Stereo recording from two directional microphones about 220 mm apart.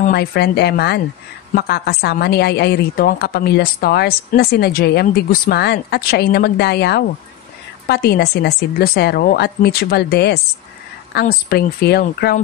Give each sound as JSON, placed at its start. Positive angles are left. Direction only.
{"t": 0.1, "sound": "a woman's voice", "side_deg": 45}